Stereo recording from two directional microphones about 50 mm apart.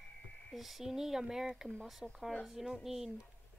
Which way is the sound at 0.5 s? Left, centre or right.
Centre.